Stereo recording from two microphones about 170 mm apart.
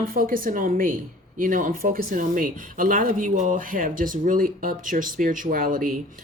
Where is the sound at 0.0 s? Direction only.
55° right (ahead or behind).